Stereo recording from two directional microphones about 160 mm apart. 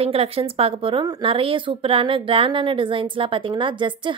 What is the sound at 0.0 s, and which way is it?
Speech, 35° right (ahead or behind).